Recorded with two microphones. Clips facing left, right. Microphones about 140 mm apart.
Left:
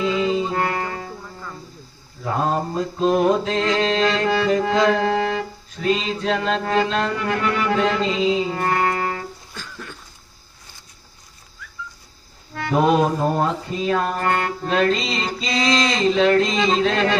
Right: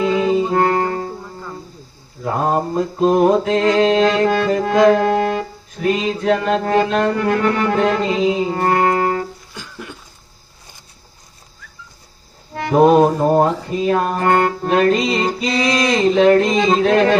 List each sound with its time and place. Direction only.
0.0 s music: 45° right (ahead or behind)
3.0 s mantra: 40° right (ahead or behind)
4.3 s music: 45° right (ahead or behind)
9.6 s a sound: 15° right (ahead or behind)
12.5 s music: 45° right (ahead or behind)